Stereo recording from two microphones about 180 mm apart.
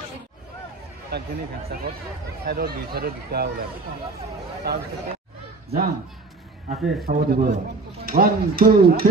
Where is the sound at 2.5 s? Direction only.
60° right (ahead or behind).